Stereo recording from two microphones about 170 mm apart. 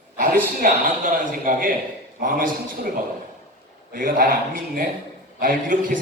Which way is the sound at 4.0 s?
55° right (ahead or behind).